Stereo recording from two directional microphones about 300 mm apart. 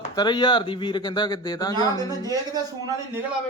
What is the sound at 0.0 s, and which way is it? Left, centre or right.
Speech, centre.